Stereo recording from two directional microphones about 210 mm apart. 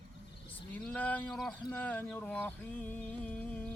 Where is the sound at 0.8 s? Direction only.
5° left (ahead or behind).